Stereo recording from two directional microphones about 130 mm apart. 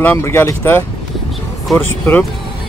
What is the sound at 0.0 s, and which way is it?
Speech, 15° left (ahead or behind).